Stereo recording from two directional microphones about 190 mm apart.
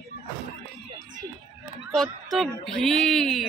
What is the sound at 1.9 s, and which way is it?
Speech, centre (ahead or behind).